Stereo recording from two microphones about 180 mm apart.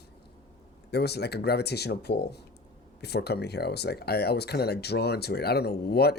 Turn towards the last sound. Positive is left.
turn(degrees=60)  # may be behind; listen again after turning